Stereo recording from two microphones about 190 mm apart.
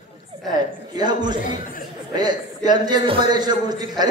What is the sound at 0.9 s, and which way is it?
Speech, 20° right (ahead or behind).